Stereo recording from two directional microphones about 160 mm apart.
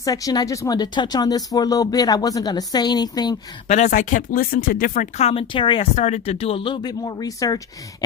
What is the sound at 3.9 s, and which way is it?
Speech, 55° left (ahead or behind).